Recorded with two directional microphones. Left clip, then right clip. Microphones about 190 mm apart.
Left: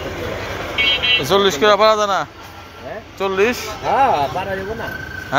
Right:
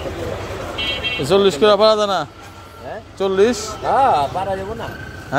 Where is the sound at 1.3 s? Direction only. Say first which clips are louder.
Right 3 dB; 40° right (ahead or behind).